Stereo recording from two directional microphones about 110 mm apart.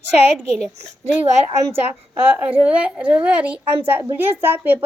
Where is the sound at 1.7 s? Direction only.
20° right (ahead or behind).